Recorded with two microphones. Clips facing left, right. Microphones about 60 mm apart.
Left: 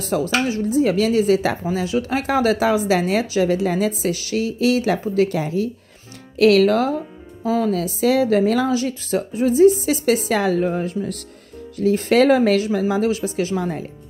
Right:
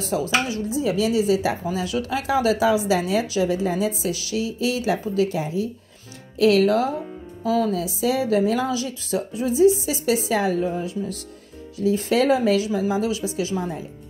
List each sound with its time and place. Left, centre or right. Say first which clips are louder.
0.1 s speech: left 3 dB; left
1.7 s speech: left 3 dB; left
2.2 s a woman's voice: even; left
4.9 s speech: left 3 dB; left
5.3 s speech: left 3 dB; left
7.4 s speech: left 1 dB; left
7.7 s a woman's voice: left 4 dB; left
8.8 s a woman's voice: left 4 dB; left
13.6 s a woman's voice: left 4 dB; left